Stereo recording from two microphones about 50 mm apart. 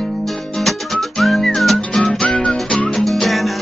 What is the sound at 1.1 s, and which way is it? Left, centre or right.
Whistling, centre.